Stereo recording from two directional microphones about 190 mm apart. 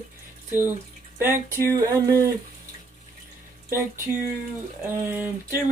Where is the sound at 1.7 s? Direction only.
20° right (ahead or behind).